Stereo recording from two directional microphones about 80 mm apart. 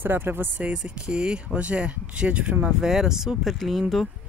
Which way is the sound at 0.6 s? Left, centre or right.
Centre.